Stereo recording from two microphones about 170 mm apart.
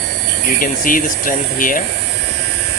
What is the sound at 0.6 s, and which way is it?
Speech, 55° left (ahead or behind).